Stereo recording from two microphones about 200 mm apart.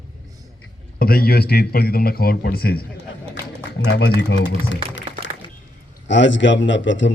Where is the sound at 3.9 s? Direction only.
60° left (ahead or behind).